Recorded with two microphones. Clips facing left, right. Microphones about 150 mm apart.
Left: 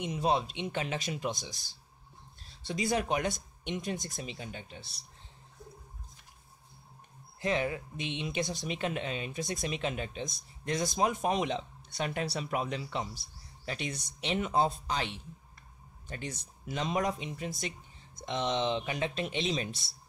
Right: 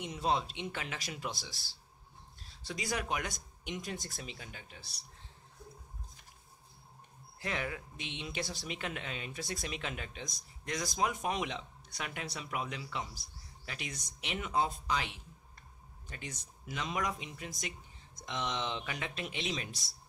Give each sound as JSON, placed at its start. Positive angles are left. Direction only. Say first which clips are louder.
{"t": 0.0, "sound": "speech", "louder": "left 4 dB", "side_deg": 20}
{"t": 7.3, "sound": "speech", "louder": "left 7 dB", "side_deg": 25}